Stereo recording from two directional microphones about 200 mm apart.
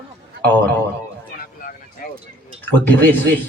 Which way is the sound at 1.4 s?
45° left (ahead or behind).